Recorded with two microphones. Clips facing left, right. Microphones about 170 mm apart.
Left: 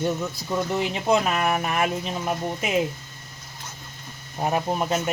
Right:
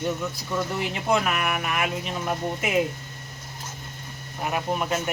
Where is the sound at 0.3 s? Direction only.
25° left (ahead or behind).